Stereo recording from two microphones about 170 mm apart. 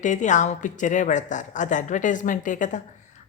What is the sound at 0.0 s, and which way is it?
Speech, 45° left (ahead or behind).